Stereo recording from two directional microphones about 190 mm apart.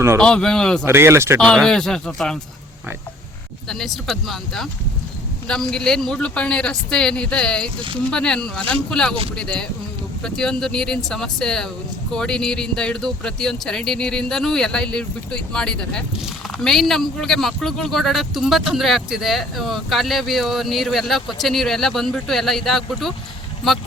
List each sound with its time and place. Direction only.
0.2 s speech: 5° left (ahead or behind)
0.9 s speech: 15° right (ahead or behind)
1.4 s speech: 5° left (ahead or behind)
3.7 s speech: centre (ahead or behind)